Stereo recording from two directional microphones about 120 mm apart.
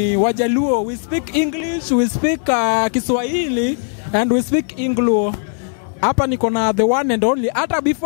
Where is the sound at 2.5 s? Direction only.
15° left (ahead or behind).